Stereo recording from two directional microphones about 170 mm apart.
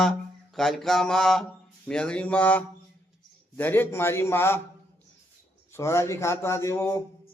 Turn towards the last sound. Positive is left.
turn(degrees=15)  # may be behind; listen again after turning